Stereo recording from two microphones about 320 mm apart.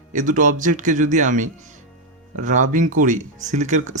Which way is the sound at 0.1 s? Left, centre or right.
Right.